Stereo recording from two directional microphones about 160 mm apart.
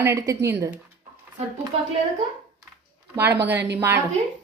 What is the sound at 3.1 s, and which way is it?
Speech, 15° right (ahead or behind).